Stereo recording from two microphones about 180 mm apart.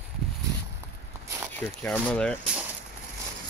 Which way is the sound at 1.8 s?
5° left (ahead or behind).